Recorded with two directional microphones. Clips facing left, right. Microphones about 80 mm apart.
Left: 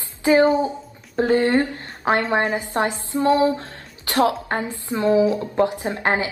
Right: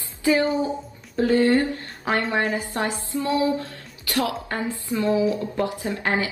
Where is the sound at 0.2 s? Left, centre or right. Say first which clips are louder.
Left 5 dB; left.